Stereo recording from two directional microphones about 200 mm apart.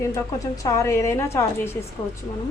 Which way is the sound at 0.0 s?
15° left (ahead or behind).